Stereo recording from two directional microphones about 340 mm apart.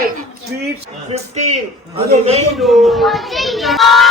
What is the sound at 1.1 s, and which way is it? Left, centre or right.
A man's voice, centre.